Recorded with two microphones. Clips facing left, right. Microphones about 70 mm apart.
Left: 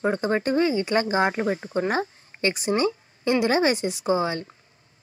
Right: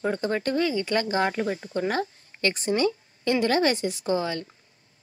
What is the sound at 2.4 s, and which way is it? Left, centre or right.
Speech, centre.